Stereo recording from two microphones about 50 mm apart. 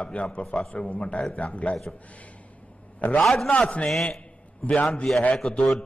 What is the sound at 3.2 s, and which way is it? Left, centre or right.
Speech, centre.